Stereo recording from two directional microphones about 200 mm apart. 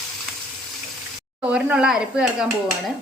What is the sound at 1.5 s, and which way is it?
Speech, 5° right (ahead or behind).